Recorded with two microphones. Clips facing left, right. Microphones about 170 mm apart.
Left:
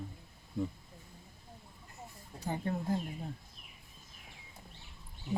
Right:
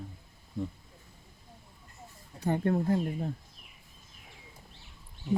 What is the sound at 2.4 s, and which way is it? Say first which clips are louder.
Speech: right 8 dB; 60° right (ahead or behind).